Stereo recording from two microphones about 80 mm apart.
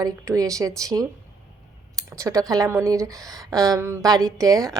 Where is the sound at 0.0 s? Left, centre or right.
Right.